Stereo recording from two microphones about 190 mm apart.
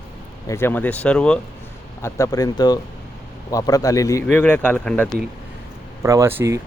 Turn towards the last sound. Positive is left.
turn(degrees=-15)  # may be behind; listen again after turning